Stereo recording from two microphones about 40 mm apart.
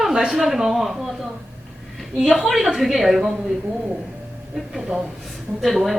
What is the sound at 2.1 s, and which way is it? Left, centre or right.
A woman's voice, centre.